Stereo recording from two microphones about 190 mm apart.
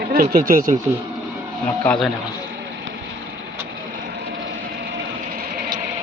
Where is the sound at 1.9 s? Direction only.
5° left (ahead or behind).